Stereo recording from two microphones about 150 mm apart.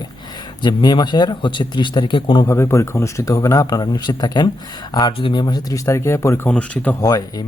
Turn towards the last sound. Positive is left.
turn(degrees=25)  # may be behind; listen again after turning